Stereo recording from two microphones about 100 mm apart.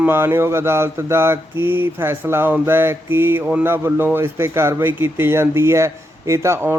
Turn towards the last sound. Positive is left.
turn(degrees=-30)  # may be behind; listen again after turning